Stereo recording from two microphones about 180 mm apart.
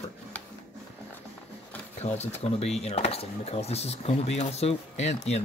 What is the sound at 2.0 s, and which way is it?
Speech, 35° left (ahead or behind).